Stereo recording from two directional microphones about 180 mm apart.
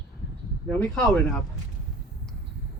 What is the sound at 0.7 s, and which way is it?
Speech, 10° left (ahead or behind).